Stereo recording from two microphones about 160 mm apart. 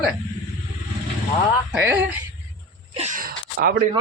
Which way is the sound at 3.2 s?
65° right (ahead or behind).